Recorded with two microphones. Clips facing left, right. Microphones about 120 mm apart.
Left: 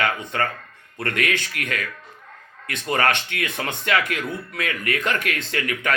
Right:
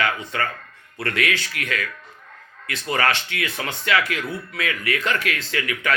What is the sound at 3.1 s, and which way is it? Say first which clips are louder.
Speech: even; 45° left (ahead or behind).